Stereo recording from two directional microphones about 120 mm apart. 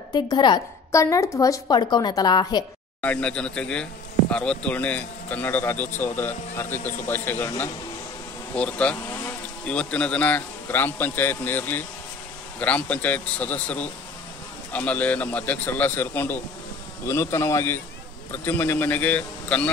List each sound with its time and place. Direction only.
0.1 s speech: 40° left (ahead or behind)
0.9 s speech: 25° left (ahead or behind)
3.0 s speech: 10° left (ahead or behind)